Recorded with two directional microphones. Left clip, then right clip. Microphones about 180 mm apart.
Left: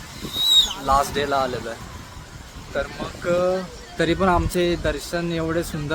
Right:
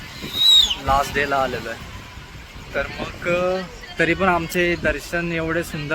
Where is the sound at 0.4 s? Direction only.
50° left (ahead or behind).